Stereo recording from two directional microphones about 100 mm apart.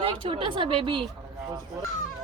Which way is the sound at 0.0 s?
65° right (ahead or behind).